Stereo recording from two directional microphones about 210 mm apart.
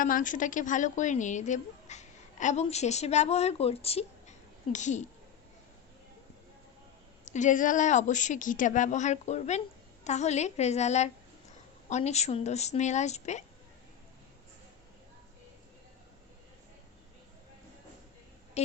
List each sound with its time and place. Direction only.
0.0 s speech: 40° left (ahead or behind)
7.3 s speech: 35° left (ahead or behind)
18.6 s speech: 30° left (ahead or behind)